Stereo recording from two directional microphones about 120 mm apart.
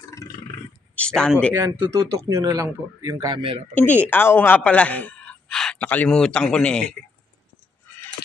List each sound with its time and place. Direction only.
0.2 s roar: 25° left (ahead or behind)
0.9 s a sound: 5° left (ahead or behind)
1.5 s speech: 20° right (ahead or behind)
3.7 s a man's voice: 10° left (ahead or behind)